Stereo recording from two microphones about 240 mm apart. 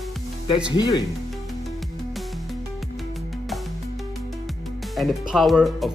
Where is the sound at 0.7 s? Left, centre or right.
Centre.